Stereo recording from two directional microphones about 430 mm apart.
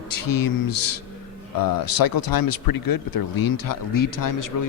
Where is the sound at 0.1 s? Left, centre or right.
Left.